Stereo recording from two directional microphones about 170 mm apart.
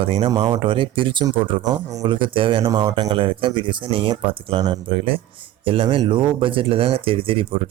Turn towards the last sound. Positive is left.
turn(degrees=-30)  # may be behind; listen again after turning